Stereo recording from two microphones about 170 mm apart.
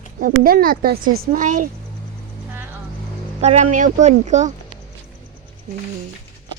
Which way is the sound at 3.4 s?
40° right (ahead or behind).